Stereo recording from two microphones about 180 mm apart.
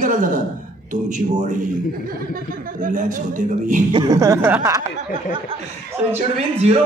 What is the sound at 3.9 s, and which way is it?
Speech, 20° right (ahead or behind).